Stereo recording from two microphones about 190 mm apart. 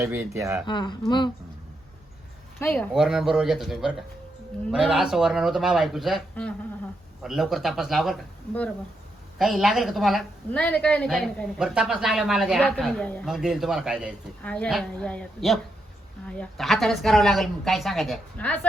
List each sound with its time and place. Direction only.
0.0 s speech: 15° right (ahead or behind)
0.6 s speech: 25° left (ahead or behind)
2.6 s speech: 10° left (ahead or behind)
2.9 s a woman's voice: 5° right (ahead or behind)